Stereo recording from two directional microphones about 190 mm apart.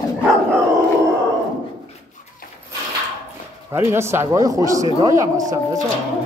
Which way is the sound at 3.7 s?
15° right (ahead or behind).